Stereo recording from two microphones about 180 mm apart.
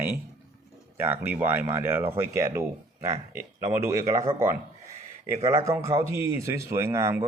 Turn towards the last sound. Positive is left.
turn(degrees=-15)  # may be behind; listen again after turning